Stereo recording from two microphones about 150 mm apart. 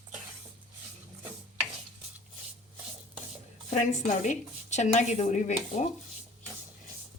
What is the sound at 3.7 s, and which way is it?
A woman's voice, 50° left (ahead or behind).